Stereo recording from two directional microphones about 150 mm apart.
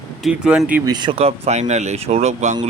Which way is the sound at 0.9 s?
30° right (ahead or behind).